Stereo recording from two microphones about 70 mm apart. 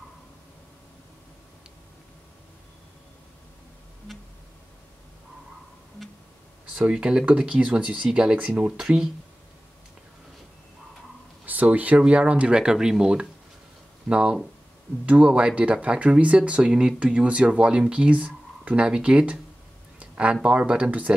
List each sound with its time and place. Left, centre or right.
6.6 s speech: centre
11.4 s speech: right
20.0 s a sound: centre
20.4 s speech: centre